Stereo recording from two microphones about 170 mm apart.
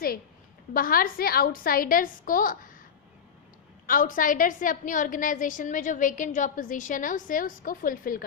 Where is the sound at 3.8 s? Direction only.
55° left (ahead or behind).